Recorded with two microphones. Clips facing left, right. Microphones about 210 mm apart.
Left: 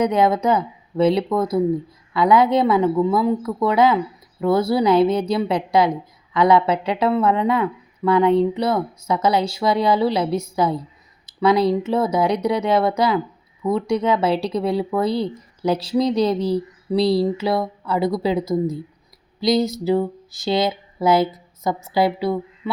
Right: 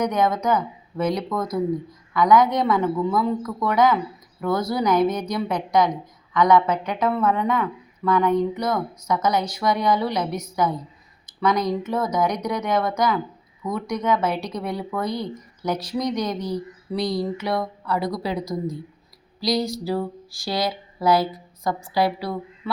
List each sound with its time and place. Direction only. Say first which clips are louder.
0.0 s speech: left 4 dB; 30° left (ahead or behind)